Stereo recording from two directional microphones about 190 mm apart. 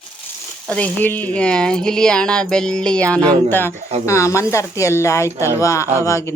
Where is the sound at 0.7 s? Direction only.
10° left (ahead or behind).